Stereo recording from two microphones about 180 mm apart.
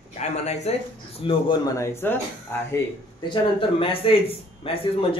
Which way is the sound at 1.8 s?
15° left (ahead or behind).